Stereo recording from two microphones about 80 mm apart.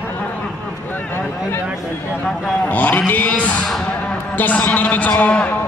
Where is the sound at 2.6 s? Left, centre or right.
Centre.